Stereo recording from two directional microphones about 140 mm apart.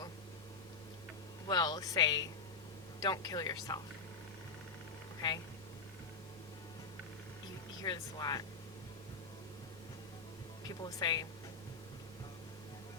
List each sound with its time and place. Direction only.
1.5 s speech: 30° left (ahead or behind)
5.2 s speech: 35° left (ahead or behind)
7.8 s speech: 30° left (ahead or behind)
10.7 s speech: 30° left (ahead or behind)